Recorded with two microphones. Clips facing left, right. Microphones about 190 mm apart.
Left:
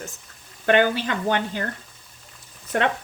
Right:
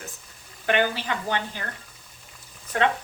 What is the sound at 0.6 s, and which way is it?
Speech, 55° left (ahead or behind).